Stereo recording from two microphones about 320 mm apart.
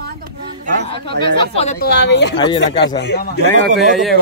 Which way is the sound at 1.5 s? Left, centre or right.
Centre.